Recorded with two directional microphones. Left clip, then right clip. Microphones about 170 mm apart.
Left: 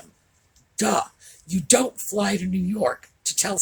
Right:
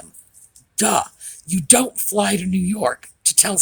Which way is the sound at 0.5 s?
60° right (ahead or behind).